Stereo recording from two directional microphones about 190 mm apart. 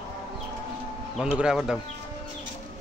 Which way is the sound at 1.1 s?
5° right (ahead or behind).